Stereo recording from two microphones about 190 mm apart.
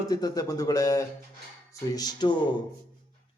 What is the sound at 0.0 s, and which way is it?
A man's voice, 20° left (ahead or behind).